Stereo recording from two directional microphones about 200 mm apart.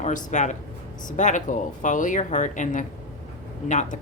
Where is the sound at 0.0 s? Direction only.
35° left (ahead or behind).